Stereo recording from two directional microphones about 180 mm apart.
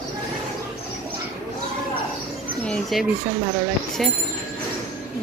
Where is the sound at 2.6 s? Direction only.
Centre (ahead or behind).